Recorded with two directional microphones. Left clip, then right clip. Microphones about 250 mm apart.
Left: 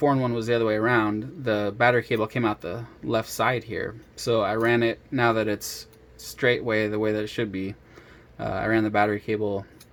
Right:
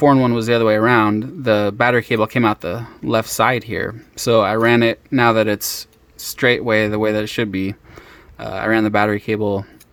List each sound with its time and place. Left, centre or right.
0.0 s speech: right